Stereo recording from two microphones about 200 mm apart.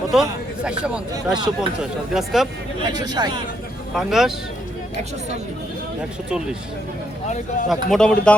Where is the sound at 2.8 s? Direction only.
20° right (ahead or behind).